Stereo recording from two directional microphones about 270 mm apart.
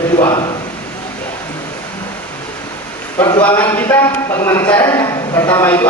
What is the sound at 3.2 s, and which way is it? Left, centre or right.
Speech, centre.